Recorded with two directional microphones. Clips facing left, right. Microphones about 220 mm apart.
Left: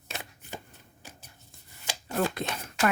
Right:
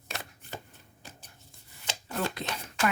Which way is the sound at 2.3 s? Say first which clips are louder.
Left 3 dB; 50° left (ahead or behind).